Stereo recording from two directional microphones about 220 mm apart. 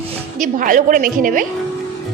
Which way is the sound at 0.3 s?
35° right (ahead or behind).